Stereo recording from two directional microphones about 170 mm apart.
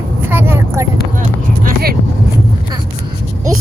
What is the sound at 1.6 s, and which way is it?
Vehicle, 65° right (ahead or behind).